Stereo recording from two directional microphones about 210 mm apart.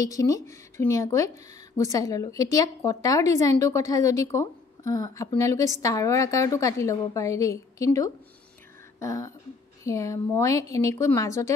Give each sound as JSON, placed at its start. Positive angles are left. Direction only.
{"t": 0.0, "sound": "a woman's voice", "side_deg": 15}